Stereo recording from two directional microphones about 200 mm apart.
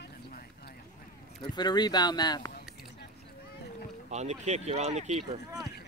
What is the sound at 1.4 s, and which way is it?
Speech, 20° left (ahead or behind).